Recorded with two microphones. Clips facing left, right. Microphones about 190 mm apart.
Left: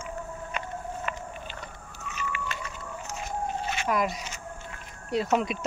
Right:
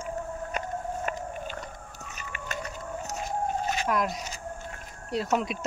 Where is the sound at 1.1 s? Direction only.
45° right (ahead or behind).